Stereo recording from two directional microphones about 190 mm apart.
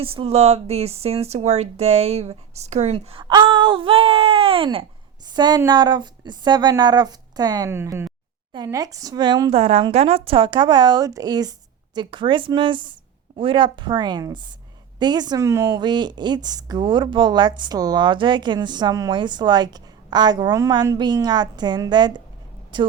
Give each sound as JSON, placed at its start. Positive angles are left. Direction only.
{"t": 0.0, "sound": "speech", "side_deg": -30}